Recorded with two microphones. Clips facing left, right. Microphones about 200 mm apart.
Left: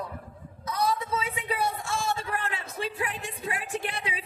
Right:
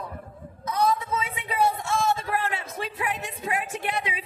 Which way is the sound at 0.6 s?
35° left (ahead or behind).